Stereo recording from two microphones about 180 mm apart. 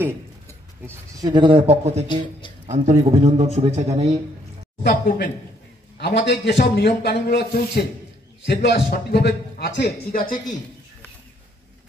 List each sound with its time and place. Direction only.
0.8 s a man's voice: 20° right (ahead or behind); by 4.2 s 35° right (ahead or behind)
4.8 s speech: 55° left (ahead or behind)
5.9 s a man's voice: 65° left (ahead or behind)